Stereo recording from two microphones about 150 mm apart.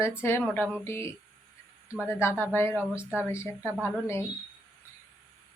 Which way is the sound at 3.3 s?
15° left (ahead or behind).